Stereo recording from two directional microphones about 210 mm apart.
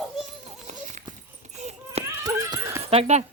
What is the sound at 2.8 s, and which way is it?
Speech, 30° right (ahead or behind).